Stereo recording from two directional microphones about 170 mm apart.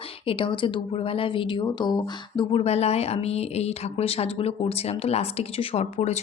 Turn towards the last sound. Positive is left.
turn(degrees=40)  # may be behind; listen again after turning